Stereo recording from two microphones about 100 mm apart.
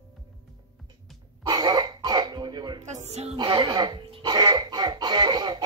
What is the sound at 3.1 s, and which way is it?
Speech, 90° right.